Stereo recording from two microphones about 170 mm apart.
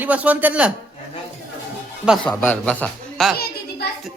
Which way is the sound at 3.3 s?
65° left (ahead or behind).